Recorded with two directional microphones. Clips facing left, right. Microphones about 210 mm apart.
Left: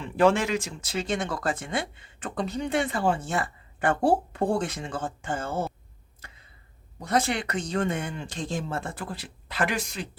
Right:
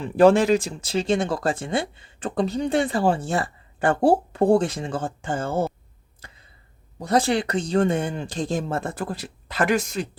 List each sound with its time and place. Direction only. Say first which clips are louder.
0.0 s speech: right 6 dB; 35° right (ahead or behind)
7.0 s speech: right 5 dB; 35° right (ahead or behind)